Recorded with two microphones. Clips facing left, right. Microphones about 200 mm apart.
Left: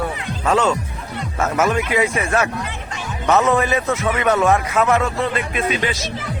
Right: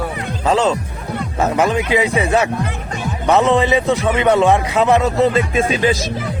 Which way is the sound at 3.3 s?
15° right (ahead or behind).